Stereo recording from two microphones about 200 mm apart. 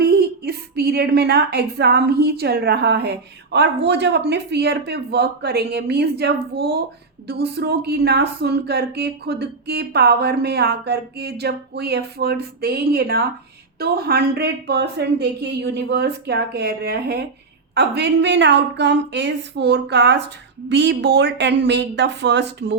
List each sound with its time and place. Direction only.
0.0 s a woman's voice: 50° right (ahead or behind)